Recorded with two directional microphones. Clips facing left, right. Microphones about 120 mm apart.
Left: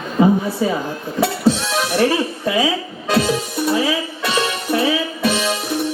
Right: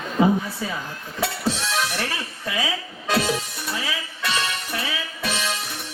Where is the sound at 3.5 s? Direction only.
20° left (ahead or behind).